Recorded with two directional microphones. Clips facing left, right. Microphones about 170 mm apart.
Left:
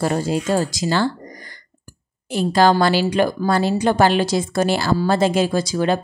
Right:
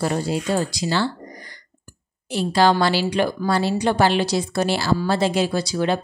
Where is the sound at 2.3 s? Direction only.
50° left (ahead or behind).